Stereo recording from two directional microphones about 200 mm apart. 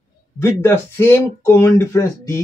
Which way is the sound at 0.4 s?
10° left (ahead or behind).